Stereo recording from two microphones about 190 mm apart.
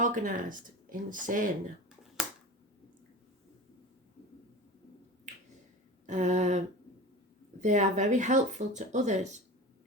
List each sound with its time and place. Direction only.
0.0 s speech: 45° right (ahead or behind)
6.1 s speech: 40° right (ahead or behind)